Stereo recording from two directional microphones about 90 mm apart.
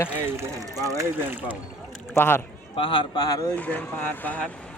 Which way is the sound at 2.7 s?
70° left (ahead or behind).